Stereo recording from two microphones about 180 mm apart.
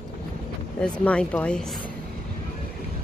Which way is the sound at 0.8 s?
5° left (ahead or behind).